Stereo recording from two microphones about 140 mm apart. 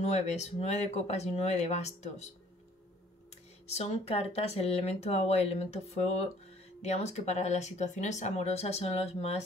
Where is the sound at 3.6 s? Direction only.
45° left (ahead or behind).